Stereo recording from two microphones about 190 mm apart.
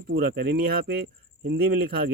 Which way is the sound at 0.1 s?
55° right (ahead or behind).